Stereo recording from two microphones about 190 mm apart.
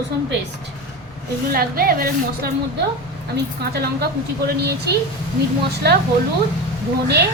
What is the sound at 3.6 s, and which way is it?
A woman's voice, 55° right (ahead or behind).